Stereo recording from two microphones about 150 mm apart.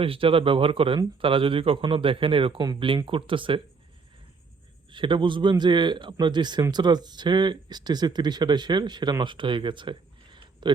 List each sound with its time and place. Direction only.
0.0 s speech: 35° right (ahead or behind)
4.9 s speech: 35° right (ahead or behind)